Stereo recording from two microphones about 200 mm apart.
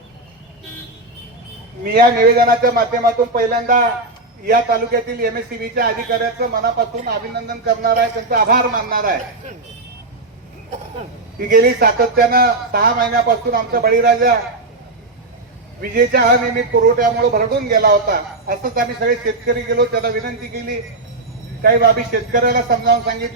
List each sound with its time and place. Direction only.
1.8 s a man's voice: 45° right (ahead or behind)
11.4 s a man's voice: 45° right (ahead or behind)
15.8 s a man's voice: 50° right (ahead or behind)